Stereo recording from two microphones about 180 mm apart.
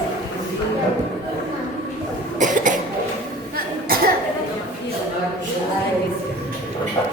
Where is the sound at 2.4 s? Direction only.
45° right (ahead or behind).